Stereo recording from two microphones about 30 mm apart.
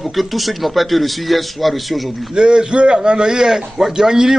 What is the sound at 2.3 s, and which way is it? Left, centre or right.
Speech, right.